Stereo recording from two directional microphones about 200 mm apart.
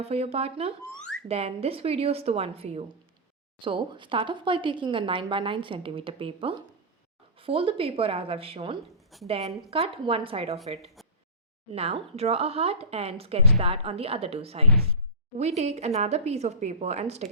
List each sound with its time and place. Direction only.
0.0 s a woman's voice: 30° right (ahead or behind)
9.1 s a woman's voice: centre (ahead or behind)
9.6 s speech: 30° right (ahead or behind)
11.0 s a sound: centre (ahead or behind)
11.7 s a woman's voice: 30° right (ahead or behind)